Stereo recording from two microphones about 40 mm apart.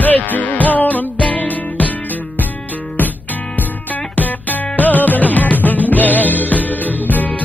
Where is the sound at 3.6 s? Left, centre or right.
Left.